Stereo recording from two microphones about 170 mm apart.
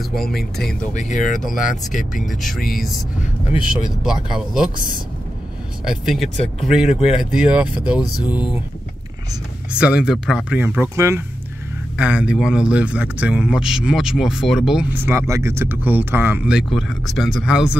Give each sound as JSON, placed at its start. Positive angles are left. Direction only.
{"t": 0.0, "sound": "speech", "side_deg": 0}
{"t": 0.9, "sound": "speech", "side_deg": 45}
{"t": 2.2, "sound": "speech", "side_deg": 0}
{"t": 4.0, "sound": "speech", "side_deg": -5}
{"t": 5.9, "sound": "speech", "side_deg": 0}
{"t": 9.8, "sound": "speech", "side_deg": -5}